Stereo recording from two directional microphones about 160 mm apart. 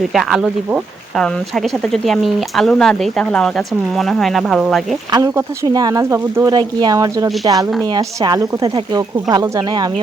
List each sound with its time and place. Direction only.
0.1 s speech: centre (ahead or behind)
5.1 s speech: 20° right (ahead or behind)
6.5 s speech: 30° right (ahead or behind)